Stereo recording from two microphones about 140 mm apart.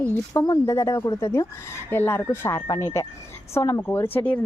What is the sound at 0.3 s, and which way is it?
Speech, 25° left (ahead or behind).